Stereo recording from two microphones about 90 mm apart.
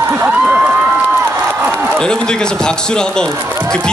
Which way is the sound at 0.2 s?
15° right (ahead or behind).